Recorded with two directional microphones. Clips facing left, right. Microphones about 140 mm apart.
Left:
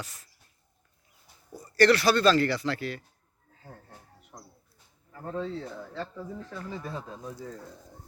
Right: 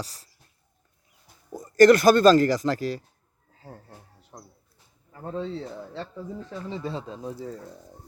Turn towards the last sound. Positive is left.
turn(degrees=-30)  # may be behind; listen again after turning